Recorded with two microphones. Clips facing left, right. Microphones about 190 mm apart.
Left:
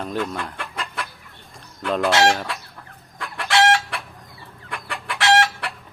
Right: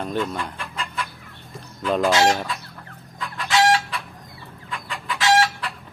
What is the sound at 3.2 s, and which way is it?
Chicken, 70° left (ahead or behind).